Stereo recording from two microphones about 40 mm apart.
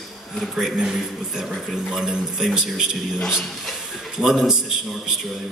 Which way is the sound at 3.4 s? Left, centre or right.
Centre.